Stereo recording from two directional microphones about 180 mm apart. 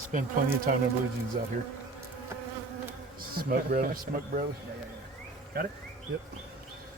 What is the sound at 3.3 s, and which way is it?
Speech, 55° right (ahead or behind).